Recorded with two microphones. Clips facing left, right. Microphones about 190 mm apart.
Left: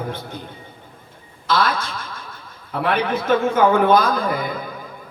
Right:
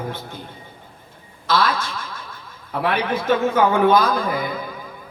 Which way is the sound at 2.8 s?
50° left (ahead or behind).